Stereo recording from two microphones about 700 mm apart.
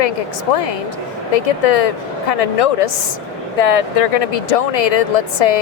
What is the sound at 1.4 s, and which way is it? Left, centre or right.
Speech, left.